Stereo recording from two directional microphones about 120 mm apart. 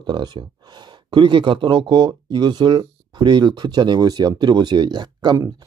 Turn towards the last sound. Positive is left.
turn(degrees=-35)  # may be behind; listen again after turning